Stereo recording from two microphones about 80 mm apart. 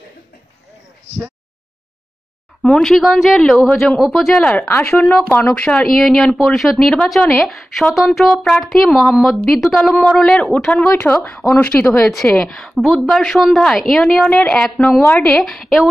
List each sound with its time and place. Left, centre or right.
2.6 s speech: centre
4.3 s a woman's voice: centre
4.6 s speech: left
5.9 s a woman's voice: centre
9.8 s a woman's voice: centre
10.9 s speech: left
12.1 s a woman's voice: centre
14.8 s speech: left
15.2 s speech: centre